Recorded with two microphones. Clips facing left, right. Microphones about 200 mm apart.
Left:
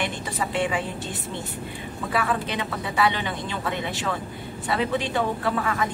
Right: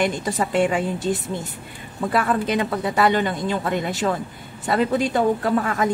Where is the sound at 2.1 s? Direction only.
45° right (ahead or behind).